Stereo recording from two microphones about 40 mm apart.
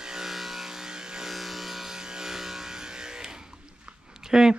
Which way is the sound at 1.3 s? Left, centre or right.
Centre.